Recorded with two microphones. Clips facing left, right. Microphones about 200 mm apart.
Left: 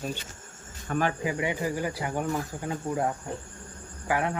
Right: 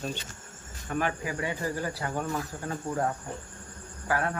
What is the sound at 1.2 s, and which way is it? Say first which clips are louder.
Speech: left 3 dB; 15° left (ahead or behind).